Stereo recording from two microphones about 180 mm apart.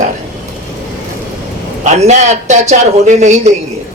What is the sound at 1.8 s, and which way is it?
A man's voice, 40° right (ahead or behind).